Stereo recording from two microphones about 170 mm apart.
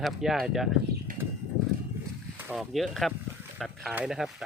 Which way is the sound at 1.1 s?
55° right (ahead or behind).